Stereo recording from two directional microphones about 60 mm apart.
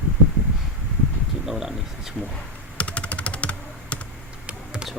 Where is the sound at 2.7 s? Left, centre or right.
Left.